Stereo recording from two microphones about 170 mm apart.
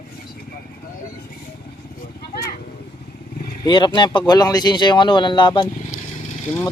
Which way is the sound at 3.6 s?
30° left (ahead or behind).